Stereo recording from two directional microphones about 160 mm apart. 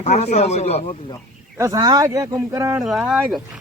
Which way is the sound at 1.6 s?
25° right (ahead or behind).